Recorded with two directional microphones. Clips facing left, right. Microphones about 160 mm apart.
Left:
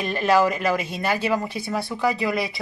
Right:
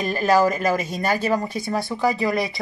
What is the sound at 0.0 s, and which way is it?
Speech, centre (ahead or behind).